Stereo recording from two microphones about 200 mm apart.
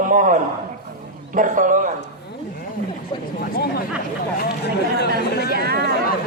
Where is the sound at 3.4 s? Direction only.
50° left (ahead or behind).